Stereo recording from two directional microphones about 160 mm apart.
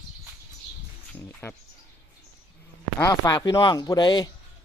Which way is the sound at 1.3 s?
10° left (ahead or behind).